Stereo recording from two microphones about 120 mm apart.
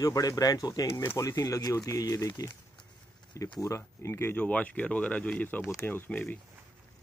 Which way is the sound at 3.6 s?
25° left (ahead or behind).